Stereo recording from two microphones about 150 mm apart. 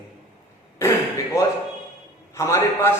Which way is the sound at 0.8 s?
20° left (ahead or behind).